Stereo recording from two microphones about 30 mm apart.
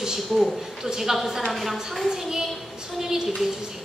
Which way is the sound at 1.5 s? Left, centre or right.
Centre.